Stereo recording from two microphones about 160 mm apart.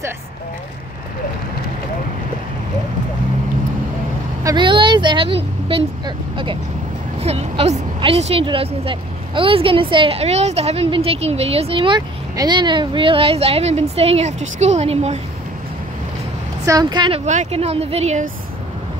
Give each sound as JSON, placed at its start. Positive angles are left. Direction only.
{"t": 4.4, "sound": "a woman's voice", "side_deg": -25}
{"t": 16.6, "sound": "a woman's voice", "side_deg": -25}
{"t": 17.3, "sound": "speech", "side_deg": -45}